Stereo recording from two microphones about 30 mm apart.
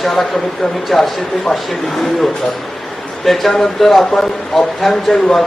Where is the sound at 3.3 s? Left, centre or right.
Centre.